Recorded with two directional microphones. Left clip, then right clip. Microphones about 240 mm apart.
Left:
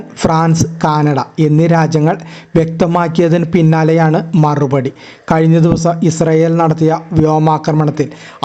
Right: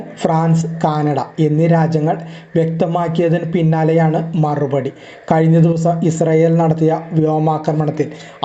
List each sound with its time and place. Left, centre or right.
0.2 s speech: left